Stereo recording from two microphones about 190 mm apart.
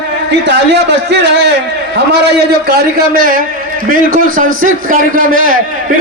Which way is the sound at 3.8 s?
45° right (ahead or behind).